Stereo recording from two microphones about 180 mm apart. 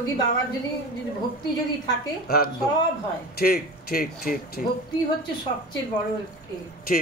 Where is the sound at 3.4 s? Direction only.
60° left (ahead or behind).